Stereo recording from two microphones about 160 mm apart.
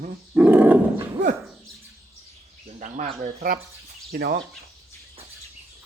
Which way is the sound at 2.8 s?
50° right (ahead or behind).